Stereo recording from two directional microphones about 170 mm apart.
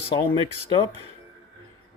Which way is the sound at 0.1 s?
25° left (ahead or behind).